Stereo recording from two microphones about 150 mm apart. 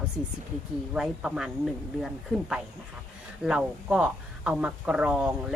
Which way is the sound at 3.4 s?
5° right (ahead or behind).